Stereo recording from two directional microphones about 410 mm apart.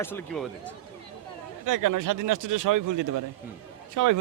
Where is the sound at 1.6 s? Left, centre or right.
Right.